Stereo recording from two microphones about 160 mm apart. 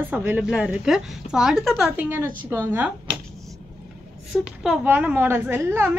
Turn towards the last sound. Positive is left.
turn(degrees=-15)  # may be behind; listen again after turning